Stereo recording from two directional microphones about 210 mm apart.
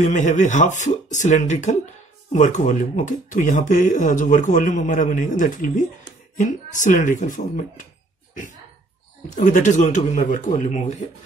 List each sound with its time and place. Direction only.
0.0 s speech: 35° left (ahead or behind)
9.3 s speech: 35° left (ahead or behind)